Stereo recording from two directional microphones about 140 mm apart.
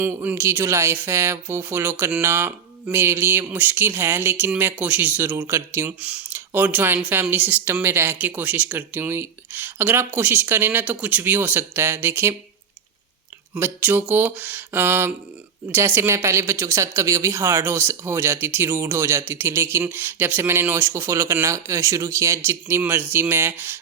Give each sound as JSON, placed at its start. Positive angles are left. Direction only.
{"t": 0.0, "sound": "speech", "side_deg": -15}
{"t": 13.6, "sound": "speech", "side_deg": -15}